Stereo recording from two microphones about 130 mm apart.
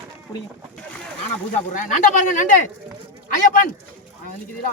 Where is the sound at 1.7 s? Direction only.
90° left.